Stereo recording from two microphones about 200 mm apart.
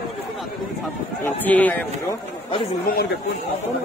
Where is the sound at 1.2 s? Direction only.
10° left (ahead or behind).